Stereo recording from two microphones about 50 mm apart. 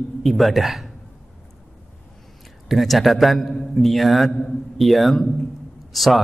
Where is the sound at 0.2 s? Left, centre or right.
Centre.